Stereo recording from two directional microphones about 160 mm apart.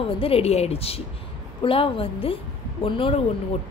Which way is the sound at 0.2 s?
40° left (ahead or behind).